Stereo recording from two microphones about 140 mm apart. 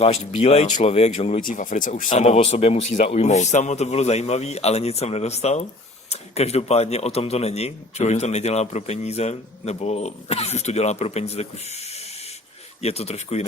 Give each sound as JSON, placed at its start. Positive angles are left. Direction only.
{"t": 0.0, "sound": "a man's voice", "side_deg": 50}
{"t": 1.4, "sound": "speech", "side_deg": 75}
{"t": 2.2, "sound": "a man's voice", "side_deg": 45}